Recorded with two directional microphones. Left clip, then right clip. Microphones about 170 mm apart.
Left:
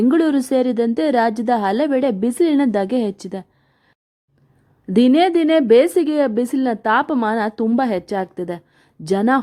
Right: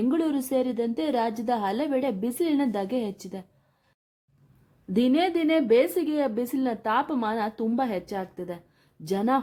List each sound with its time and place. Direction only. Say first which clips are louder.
0.0 s speech: left 10 dB; 35° left (ahead or behind)
4.9 s speech: left 9 dB; 30° left (ahead or behind)